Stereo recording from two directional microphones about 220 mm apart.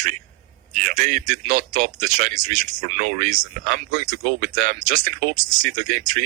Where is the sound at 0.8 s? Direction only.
35° right (ahead or behind).